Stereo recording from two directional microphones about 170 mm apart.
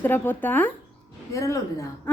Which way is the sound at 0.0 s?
10° left (ahead or behind).